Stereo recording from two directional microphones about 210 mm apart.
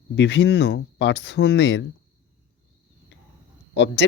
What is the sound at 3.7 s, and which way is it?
Speech, 55° left (ahead or behind).